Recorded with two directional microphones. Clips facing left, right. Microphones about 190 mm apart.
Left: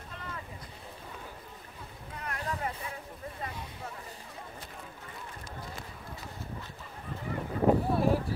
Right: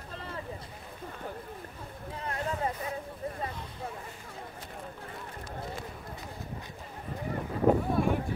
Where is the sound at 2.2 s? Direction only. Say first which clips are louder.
Right 3 dB; 30° right (ahead or behind).